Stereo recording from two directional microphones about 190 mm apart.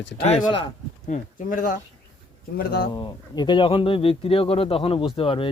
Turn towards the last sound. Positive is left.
turn(degrees=30)  # may be behind; listen again after turning